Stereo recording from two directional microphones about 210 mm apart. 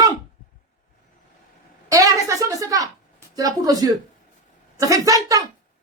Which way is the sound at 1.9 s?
15° right (ahead or behind).